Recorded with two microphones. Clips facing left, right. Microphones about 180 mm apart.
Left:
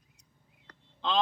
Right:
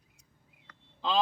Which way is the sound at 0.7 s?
40° left (ahead or behind).